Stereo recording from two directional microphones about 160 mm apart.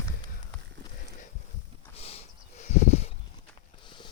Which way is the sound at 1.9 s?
40° left (ahead or behind).